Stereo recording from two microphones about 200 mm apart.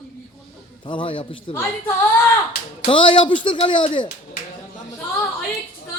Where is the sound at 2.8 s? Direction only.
25° left (ahead or behind).